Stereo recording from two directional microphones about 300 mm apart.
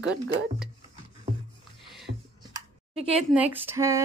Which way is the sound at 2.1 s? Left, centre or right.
Right.